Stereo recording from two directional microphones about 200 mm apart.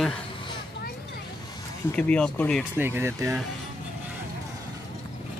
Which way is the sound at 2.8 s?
10° right (ahead or behind).